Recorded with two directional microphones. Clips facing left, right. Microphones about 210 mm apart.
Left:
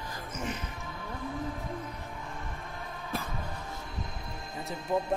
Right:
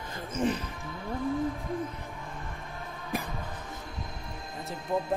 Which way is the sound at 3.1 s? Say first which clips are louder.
Right 3 dB; 15° right (ahead or behind).